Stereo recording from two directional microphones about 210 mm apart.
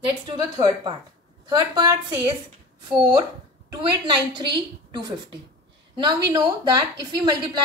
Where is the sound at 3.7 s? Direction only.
20° right (ahead or behind).